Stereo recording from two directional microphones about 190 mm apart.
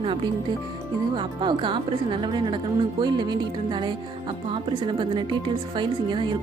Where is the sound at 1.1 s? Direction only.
25° right (ahead or behind).